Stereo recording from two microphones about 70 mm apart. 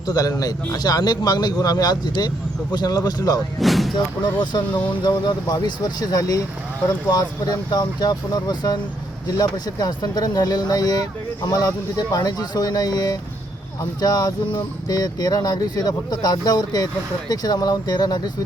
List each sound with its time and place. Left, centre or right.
0.1 s speech: left
3.6 s speech: centre
3.9 s speech: left
5.6 s speech: left